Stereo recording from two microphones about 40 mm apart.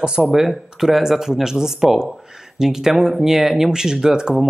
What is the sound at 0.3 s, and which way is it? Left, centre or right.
Speech, centre.